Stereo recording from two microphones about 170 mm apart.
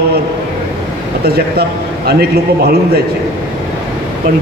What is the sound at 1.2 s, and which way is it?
A man's voice, 65° right (ahead or behind).